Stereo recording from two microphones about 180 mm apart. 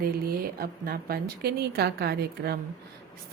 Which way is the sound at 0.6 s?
55° right (ahead or behind).